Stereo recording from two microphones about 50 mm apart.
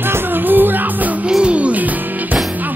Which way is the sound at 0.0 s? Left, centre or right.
Right.